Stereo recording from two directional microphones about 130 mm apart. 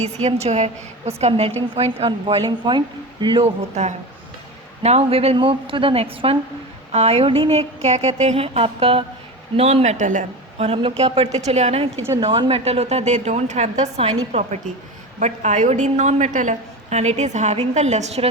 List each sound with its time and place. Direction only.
0.0 s a woman's voice: 55° right (ahead or behind)
1.3 s a woman's voice: 45° right (ahead or behind)
3.8 s a woman's voice: 60° right (ahead or behind)
10.6 s a woman's voice: 50° right (ahead or behind)